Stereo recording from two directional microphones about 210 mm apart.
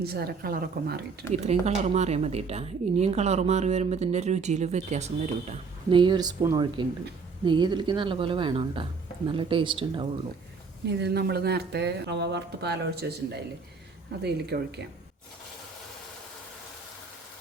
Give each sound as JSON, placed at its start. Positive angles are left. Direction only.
{"t": 0.0, "sound": "speech", "side_deg": -50}
{"t": 1.5, "sound": "speech", "side_deg": -30}
{"t": 11.0, "sound": "speech", "side_deg": -50}